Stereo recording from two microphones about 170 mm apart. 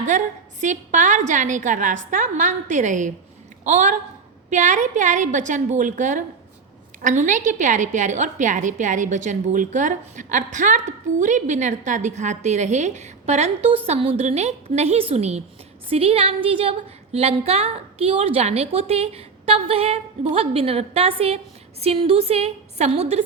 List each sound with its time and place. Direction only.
0.6 s a woman's voice: 45° right (ahead or behind)